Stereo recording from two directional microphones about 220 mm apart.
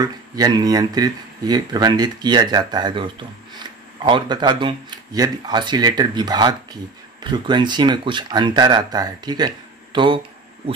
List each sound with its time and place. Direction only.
0.0 s speech: 20° right (ahead or behind)